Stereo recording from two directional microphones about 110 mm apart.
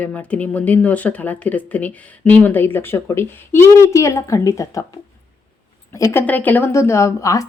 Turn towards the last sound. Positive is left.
turn(degrees=30)  # may be behind; listen again after turning